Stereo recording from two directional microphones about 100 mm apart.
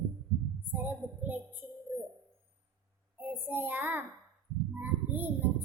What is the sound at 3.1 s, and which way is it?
Speech, 20° right (ahead or behind).